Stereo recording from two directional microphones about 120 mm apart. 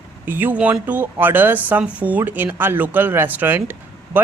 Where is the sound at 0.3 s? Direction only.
15° right (ahead or behind).